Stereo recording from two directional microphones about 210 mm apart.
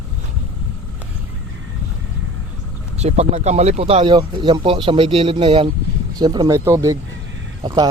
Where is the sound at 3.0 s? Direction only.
30° right (ahead or behind).